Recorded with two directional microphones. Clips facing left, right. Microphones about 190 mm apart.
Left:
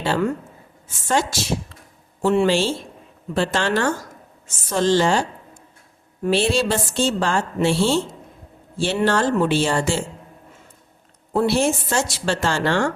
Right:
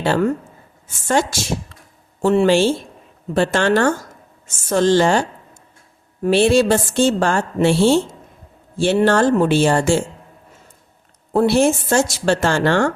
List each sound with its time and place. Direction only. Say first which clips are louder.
0.0 s a woman's voice: right 4 dB; 50° right (ahead or behind)
6.2 s a woman's voice: right 6 dB; 50° right (ahead or behind)
11.3 s a woman's voice: right 4 dB; 50° right (ahead or behind)